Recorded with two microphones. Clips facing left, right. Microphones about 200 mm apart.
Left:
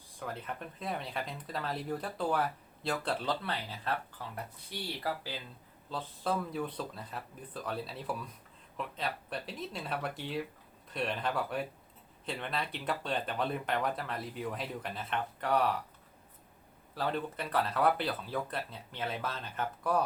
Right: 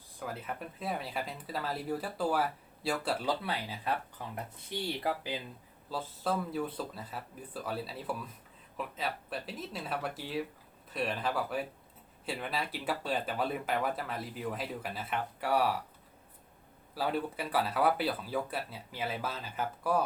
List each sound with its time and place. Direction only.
0.2 s speech: 5° right (ahead or behind)
5.9 s speech: 5° right (ahead or behind)
16.9 s speech: 10° right (ahead or behind)